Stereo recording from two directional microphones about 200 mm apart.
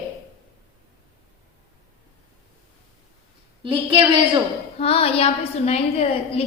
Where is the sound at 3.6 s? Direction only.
25° right (ahead or behind).